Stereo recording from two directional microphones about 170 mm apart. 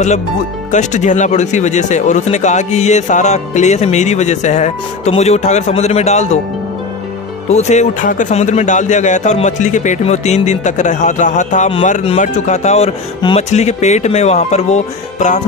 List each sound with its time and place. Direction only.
0.7 s speech: 45° left (ahead or behind)
7.4 s speech: 40° left (ahead or behind)